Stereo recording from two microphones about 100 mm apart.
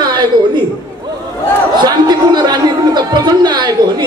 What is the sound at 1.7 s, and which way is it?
A man's voice, 45° right (ahead or behind).